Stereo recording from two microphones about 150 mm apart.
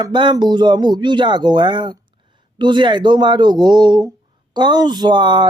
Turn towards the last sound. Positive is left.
turn(degrees=-30)  # may be behind; listen again after turning